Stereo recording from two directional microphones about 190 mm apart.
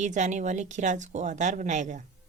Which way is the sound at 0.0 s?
40° right (ahead or behind).